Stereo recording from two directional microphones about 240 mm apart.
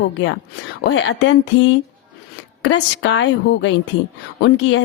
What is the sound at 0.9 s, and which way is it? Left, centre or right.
A woman's voice, left.